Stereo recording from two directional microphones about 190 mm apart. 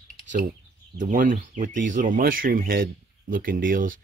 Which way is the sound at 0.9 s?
45° right (ahead or behind).